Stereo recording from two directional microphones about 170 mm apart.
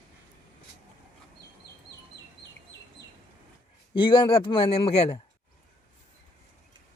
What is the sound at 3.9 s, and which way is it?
Speech, 30° left (ahead or behind).